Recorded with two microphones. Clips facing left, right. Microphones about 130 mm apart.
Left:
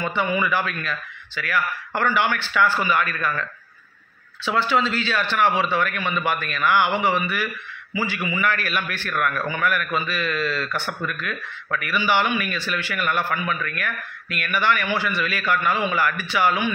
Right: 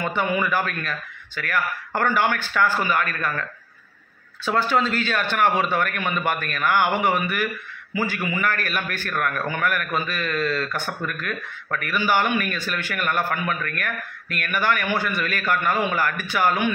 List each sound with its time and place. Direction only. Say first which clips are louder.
0.0 s a man's voice: even; 45° right (ahead or behind)
4.5 s speech: even; 45° right (ahead or behind)